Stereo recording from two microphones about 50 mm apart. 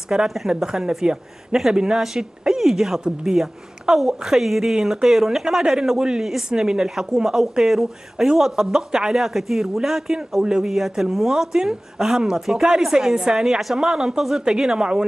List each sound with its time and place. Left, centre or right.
0.1 s speech: centre